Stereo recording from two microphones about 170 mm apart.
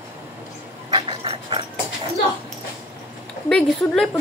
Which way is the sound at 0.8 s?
30° right (ahead or behind).